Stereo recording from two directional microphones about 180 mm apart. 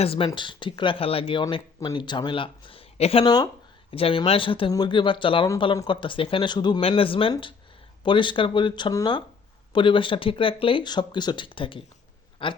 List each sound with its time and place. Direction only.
0.0 s speech: 30° left (ahead or behind)